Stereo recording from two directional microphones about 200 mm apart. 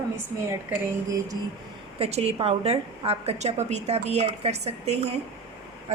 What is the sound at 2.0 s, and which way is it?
A woman's voice, 30° right (ahead or behind).